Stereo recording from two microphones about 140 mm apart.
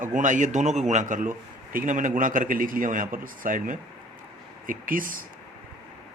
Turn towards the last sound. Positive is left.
turn(degrees=-80)